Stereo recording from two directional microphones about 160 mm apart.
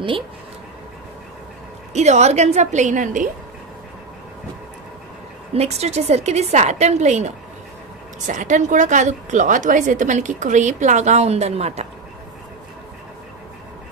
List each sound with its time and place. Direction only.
2.0 s a woman's voice: 45° right (ahead or behind)
5.5 s a woman's voice: 40° right (ahead or behind)